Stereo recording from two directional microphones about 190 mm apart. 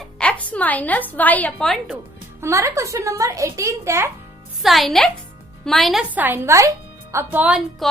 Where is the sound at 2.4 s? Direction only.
15° right (ahead or behind).